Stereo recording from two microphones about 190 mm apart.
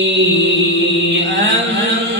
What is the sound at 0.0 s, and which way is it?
Chant, 80° right.